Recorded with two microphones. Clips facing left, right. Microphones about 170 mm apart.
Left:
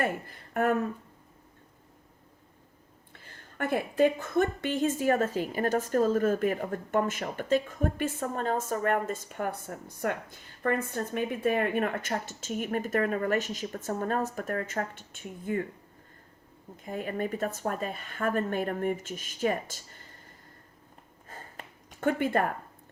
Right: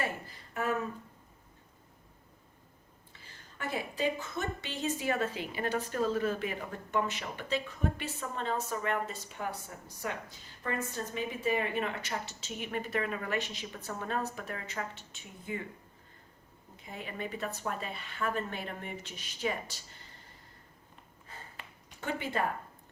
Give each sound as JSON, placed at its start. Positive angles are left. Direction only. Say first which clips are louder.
{"t": 0.0, "sound": "speech", "louder": "left 6 dB", "side_deg": 55}
{"t": 3.1, "sound": "a woman's voice", "louder": "left 4 dB", "side_deg": 55}
{"t": 16.7, "sound": "a woman's voice", "louder": "left 8 dB", "side_deg": 45}
{"t": 21.2, "sound": "a sound", "louder": "left 4 dB", "side_deg": 45}